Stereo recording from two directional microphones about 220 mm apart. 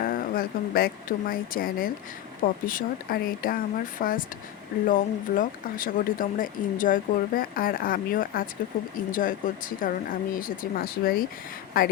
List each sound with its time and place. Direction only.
0.0 s speech: 40° left (ahead or behind)